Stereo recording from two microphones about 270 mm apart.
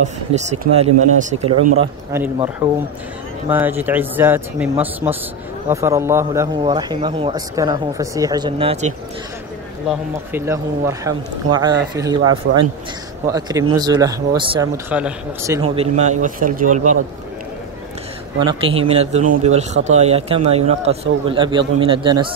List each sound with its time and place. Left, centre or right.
0.0 s speech: right
1.6 s a man's voice: right
2.1 s speech: centre
9.8 s speech: centre
12.2 s a man's voice: right
13.3 s speech: centre
14.9 s speech: centre; by 16.9 s right
18.4 s speech: centre